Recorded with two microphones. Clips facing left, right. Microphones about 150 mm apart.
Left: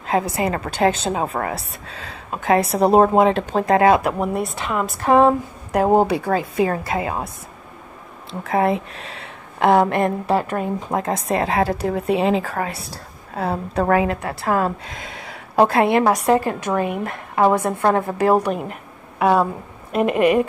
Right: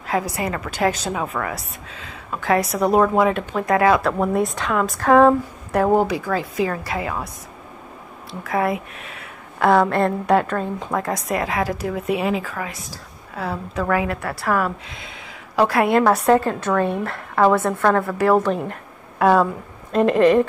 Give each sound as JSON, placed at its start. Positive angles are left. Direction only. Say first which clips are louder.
{"t": 0.0, "sound": "a woman's voice", "louder": "left 3 dB", "side_deg": 25}
{"t": 2.3, "sound": "a woman's voice", "louder": "left 2 dB", "side_deg": 25}
{"t": 4.0, "sound": "a woman's voice", "louder": "right 2 dB", "side_deg": 10}
{"t": 5.2, "sound": "a woman's voice", "louder": "right 1 dB", "side_deg": 20}
{"t": 8.3, "sound": "a woman's voice", "louder": "left 3 dB", "side_deg": 30}
{"t": 10.9, "sound": "a woman's voice", "louder": "left 2 dB", "side_deg": 25}
{"t": 14.9, "sound": "a sound", "louder": "left 4 dB", "side_deg": 45}
{"t": 15.6, "sound": "a woman's voice", "louder": "left 1 dB", "side_deg": 25}
{"t": 16.3, "sound": "a woman's voice", "louder": "right 1 dB", "side_deg": 15}